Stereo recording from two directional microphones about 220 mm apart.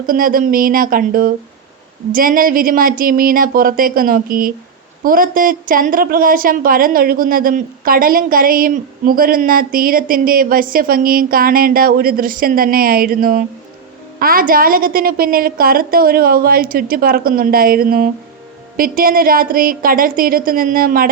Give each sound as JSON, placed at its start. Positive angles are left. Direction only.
{"t": 0.0, "sound": "a woman's voice", "side_deg": -40}